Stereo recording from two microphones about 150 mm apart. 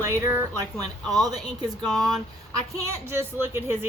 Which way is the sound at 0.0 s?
15° right (ahead or behind).